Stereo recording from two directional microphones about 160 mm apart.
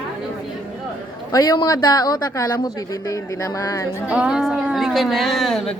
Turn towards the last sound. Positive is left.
turn(degrees=0)  # may be behind; listen again after turning